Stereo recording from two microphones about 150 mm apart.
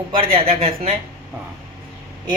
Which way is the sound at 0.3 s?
40° right (ahead or behind).